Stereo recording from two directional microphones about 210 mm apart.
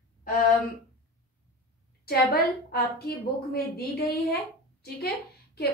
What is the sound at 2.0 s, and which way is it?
A woman's voice, 50° left (ahead or behind).